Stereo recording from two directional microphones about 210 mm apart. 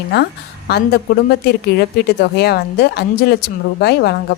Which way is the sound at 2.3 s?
50° left (ahead or behind).